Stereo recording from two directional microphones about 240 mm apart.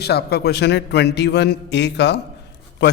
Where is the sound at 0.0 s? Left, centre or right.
Left.